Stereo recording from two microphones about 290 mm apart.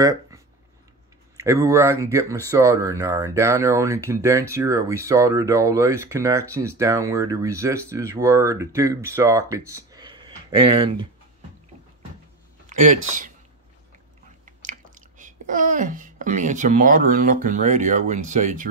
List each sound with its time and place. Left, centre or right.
1.3 s speech: centre
12.6 s speech: right
14.4 s speech: right